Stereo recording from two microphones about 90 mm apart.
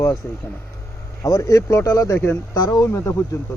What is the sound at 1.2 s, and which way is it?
Speech, 35° left (ahead or behind).